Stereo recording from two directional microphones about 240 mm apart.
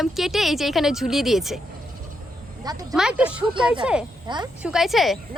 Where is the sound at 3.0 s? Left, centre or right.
Centre.